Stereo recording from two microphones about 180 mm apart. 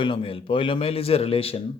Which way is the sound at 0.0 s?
30° left (ahead or behind).